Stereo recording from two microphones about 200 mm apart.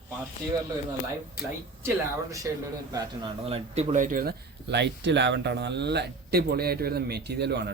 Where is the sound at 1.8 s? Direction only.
15° right (ahead or behind); by 7.7 s 55° right (ahead or behind).